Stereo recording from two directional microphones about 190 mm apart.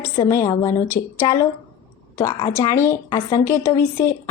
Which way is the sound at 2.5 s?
15° left (ahead or behind).